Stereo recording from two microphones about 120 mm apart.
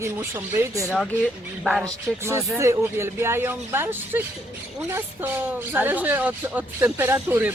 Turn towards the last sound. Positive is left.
turn(degrees=-20)  # may be behind; listen again after turning